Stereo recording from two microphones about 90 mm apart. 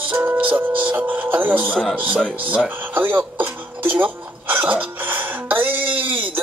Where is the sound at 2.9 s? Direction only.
20° right (ahead or behind).